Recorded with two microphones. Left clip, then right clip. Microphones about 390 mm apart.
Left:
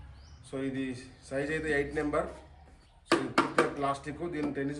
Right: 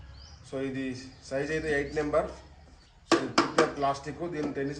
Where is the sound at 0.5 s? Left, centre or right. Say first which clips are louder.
Right 2 dB; centre.